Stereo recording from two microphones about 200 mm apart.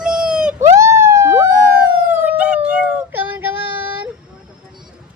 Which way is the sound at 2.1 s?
5° right (ahead or behind).